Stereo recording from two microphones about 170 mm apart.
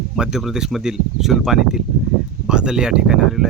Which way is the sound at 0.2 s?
5° right (ahead or behind).